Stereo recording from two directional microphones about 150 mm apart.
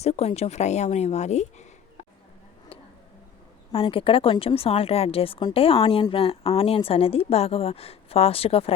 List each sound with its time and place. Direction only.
0.0 s speech: 45° left (ahead or behind)
3.7 s a woman's voice: 35° left (ahead or behind)